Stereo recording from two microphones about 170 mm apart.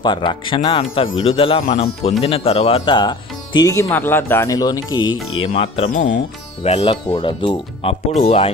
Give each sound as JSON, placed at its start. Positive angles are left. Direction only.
{"t": 0.0, "sound": "speech", "side_deg": 25}